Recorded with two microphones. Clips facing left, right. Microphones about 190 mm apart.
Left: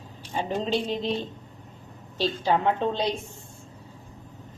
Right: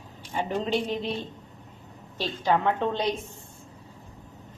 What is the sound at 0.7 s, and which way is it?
Speech, 10° right (ahead or behind).